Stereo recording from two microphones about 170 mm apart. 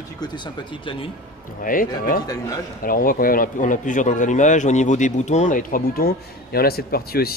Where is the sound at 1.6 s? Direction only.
55° left (ahead or behind).